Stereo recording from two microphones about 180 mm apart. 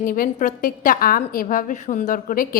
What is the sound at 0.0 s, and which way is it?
A woman's voice, 50° left (ahead or behind).